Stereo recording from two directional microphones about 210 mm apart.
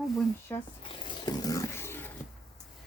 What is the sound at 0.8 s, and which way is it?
Roaring cats, 25° left (ahead or behind).